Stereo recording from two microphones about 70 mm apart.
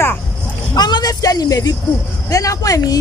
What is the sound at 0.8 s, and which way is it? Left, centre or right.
A woman's voice, left.